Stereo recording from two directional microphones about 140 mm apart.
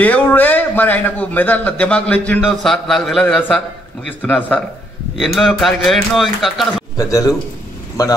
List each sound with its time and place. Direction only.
0.0 s a man's voice: 10° left (ahead or behind)
7.0 s a man's voice: 25° left (ahead or behind)